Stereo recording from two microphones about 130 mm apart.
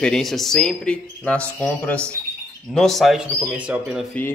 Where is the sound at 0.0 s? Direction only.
5° left (ahead or behind).